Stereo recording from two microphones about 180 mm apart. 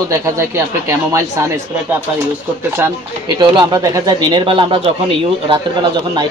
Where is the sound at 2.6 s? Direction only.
15° right (ahead or behind).